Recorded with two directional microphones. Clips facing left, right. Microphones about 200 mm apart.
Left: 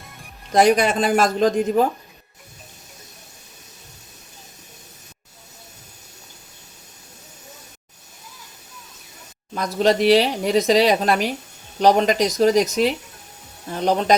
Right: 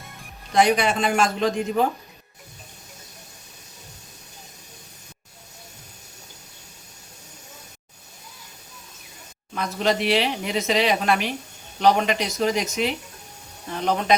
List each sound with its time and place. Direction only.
0.5 s speech: 45° left (ahead or behind)
9.6 s speech: 35° left (ahead or behind)